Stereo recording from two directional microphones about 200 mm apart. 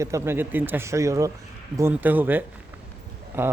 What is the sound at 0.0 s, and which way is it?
Speech, 15° right (ahead or behind).